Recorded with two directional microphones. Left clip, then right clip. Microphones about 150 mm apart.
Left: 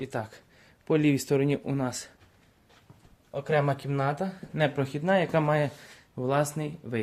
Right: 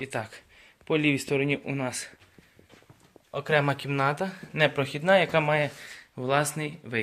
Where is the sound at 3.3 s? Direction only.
10° left (ahead or behind); by 7.0 s 30° left (ahead or behind).